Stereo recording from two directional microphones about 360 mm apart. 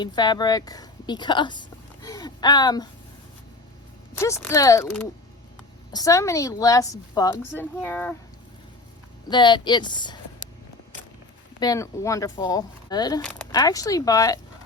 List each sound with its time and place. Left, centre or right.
0.0 s a woman's voice: centre
4.2 s speech: centre
9.3 s speech: centre
11.6 s speech: centre